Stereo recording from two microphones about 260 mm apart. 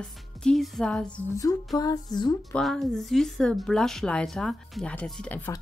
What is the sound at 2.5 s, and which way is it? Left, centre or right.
Speech, centre.